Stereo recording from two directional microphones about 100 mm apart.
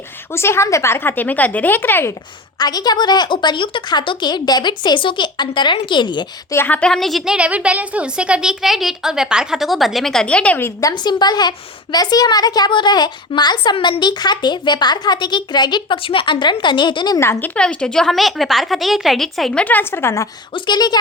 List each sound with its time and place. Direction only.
0.3 s speech: 25° left (ahead or behind)
2.6 s a woman's voice: 40° left (ahead or behind)
6.5 s speech: 25° left (ahead or behind)
6.7 s a woman's voice: 5° left (ahead or behind)
7.3 s a woman's voice: 10° right (ahead or behind); by 10.6 s 10° left (ahead or behind)
10.8 s a woman's voice: 40° left (ahead or behind)
13.7 s a woman's voice: 65° left (ahead or behind)
14.0 s a woman's voice: 45° left (ahead or behind)
17.2 s speech: 25° left (ahead or behind)
17.5 s a woman's voice: 10° left (ahead or behind)
19.6 s speech: 20° left (ahead or behind)
20.5 s a woman's voice: 45° left (ahead or behind)